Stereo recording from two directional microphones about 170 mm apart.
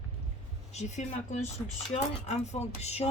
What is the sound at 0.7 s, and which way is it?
Speech, 40° left (ahead or behind).